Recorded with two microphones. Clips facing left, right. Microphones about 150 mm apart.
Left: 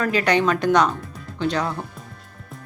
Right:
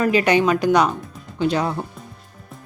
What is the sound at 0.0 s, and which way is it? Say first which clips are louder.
Speech: right 3 dB; 15° right (ahead or behind).